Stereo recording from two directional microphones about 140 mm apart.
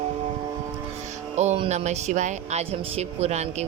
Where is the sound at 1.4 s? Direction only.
55° right (ahead or behind).